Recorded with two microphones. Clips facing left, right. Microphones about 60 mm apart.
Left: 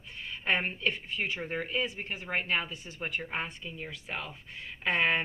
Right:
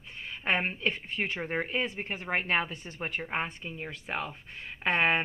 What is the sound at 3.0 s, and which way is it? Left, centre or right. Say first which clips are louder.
Speech: right 2 dB; right.